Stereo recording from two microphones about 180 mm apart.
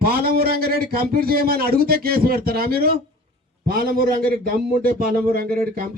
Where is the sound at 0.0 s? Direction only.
60° right (ahead or behind).